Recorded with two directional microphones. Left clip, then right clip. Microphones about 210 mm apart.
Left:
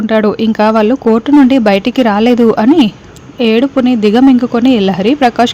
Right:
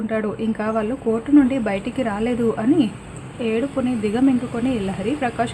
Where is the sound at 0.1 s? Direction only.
45° left (ahead or behind).